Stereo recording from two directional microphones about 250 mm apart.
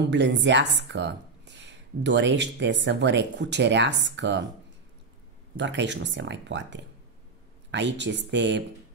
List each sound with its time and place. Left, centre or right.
0.1 s speech: right
5.6 s speech: right